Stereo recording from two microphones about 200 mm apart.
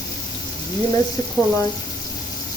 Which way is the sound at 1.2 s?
15° left (ahead or behind).